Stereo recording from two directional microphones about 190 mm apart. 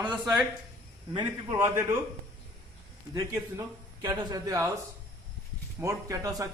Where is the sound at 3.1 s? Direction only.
15° right (ahead or behind).